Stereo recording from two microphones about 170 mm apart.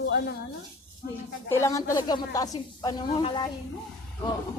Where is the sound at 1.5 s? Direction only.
20° left (ahead or behind).